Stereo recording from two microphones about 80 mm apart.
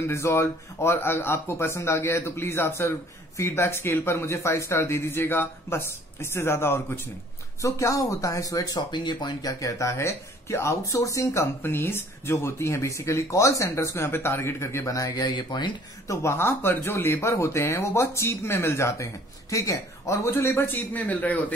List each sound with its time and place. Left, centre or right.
0.1 s speech: left
8.9 s speech: left
11.6 s speech: left
14.9 s speech: left
16.1 s a man's voice: left; by 21.4 s centre